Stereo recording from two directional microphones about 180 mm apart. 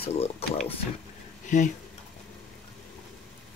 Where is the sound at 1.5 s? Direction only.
45° left (ahead or behind).